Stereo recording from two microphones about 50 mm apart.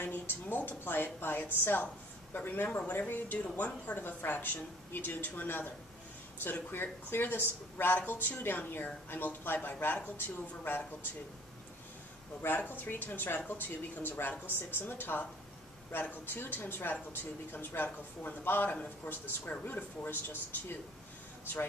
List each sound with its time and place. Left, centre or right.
0.0 s a woman's voice: left
12.5 s a man's voice: left